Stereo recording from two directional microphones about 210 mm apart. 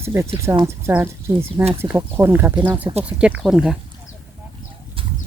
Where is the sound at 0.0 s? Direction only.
10° right (ahead or behind).